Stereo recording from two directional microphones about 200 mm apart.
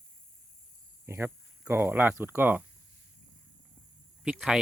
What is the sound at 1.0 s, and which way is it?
Speech, 10° right (ahead or behind).